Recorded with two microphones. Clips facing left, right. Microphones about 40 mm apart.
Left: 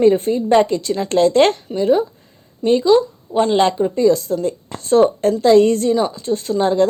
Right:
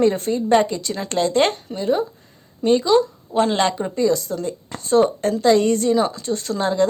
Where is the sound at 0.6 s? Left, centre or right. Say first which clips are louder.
Left 5 dB; left.